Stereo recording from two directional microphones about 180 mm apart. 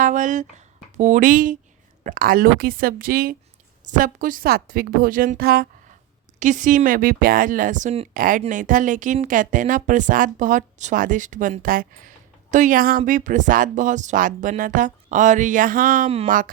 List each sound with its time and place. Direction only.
0.0 s a woman's voice: 45° right (ahead or behind)
6.4 s a woman's voice: 45° right (ahead or behind)
8.1 s a woman's voice: 50° right (ahead or behind)